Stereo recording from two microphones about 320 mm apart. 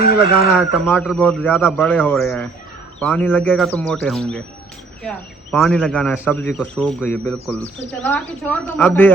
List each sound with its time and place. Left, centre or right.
0.6 s speech: centre